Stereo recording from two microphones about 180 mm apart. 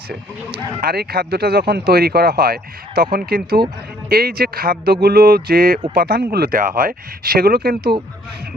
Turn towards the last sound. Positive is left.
turn(degrees=-60)  # may be behind; listen again after turning